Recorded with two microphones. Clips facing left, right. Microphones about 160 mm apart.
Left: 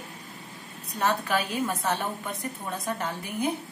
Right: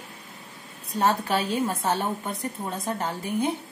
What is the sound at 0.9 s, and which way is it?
A woman's voice, 35° right (ahead or behind).